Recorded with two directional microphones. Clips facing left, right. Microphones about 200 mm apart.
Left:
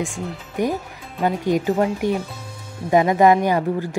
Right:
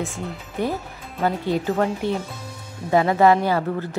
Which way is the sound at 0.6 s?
15° left (ahead or behind).